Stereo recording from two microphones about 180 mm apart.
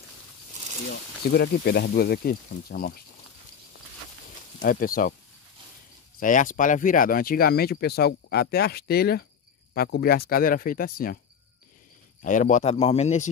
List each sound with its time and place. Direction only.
1.3 s speech: 65° left (ahead or behind)
4.6 s speech: 50° left (ahead or behind)
6.1 s speech: 45° left (ahead or behind)
12.2 s a man's voice: 45° left (ahead or behind)